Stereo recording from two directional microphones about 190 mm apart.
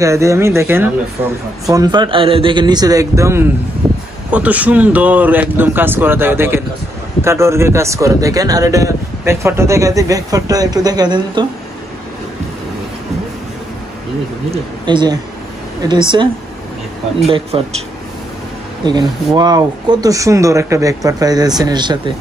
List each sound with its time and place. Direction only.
0.0 s speech: 15° right (ahead or behind)
3.8 s a sound: 5° right (ahead or behind)
4.3 s speech: 10° right (ahead or behind); by 11.4 s 25° right (ahead or behind)
14.5 s speech: 25° right (ahead or behind)
17.3 s speech: 30° right (ahead or behind)
18.9 s speech: 20° right (ahead or behind)